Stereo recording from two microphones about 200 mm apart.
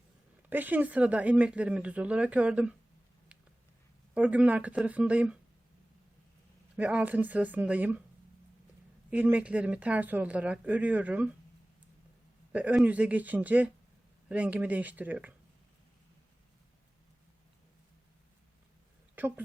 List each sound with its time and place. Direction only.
0.5 s speech: 10° right (ahead or behind)
4.1 s speech: 5° right (ahead or behind)
6.7 s speech: 10° right (ahead or behind)
9.0 s speech: 10° right (ahead or behind)
12.5 s speech: 5° right (ahead or behind)
19.2 s a sound: 10° right (ahead or behind)